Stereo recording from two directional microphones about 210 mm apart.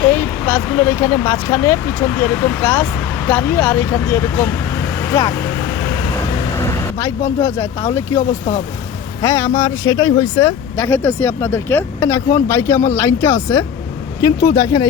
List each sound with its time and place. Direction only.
0.0 s speech: 10° left (ahead or behind)
6.3 s vehicle: 20° left (ahead or behind)
7.4 s speech: 10° left (ahead or behind)
9.2 s speech: 10° left (ahead or behind)